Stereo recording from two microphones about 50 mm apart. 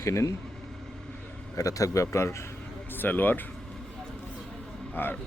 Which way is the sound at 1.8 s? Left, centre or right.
Left.